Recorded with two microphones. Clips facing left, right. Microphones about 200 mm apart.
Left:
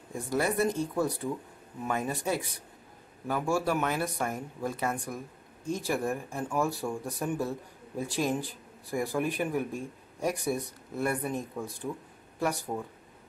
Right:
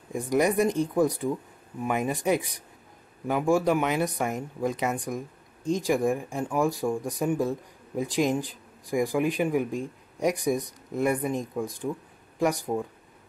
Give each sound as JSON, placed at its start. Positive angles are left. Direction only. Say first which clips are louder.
{"t": 0.1, "sound": "speech", "louder": "right 6 dB", "side_deg": -15}